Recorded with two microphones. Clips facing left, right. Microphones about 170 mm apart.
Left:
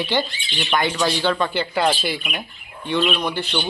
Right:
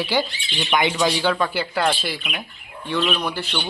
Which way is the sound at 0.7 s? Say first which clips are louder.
Right 1 dB; 15° right (ahead or behind).